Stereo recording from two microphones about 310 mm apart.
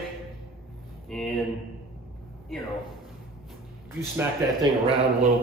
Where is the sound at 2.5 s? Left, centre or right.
Centre.